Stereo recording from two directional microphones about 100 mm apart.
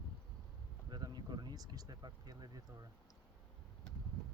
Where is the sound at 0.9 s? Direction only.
45° right (ahead or behind).